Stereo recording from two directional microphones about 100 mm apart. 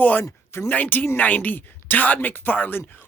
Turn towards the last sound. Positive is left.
turn(degrees=20)  # may be behind; listen again after turning